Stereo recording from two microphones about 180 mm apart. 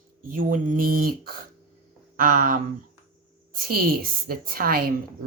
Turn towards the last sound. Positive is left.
turn(degrees=-55)  # may be behind; listen again after turning